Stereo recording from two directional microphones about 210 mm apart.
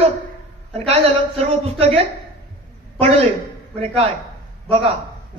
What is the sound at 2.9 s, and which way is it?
Speech, 25° right (ahead or behind).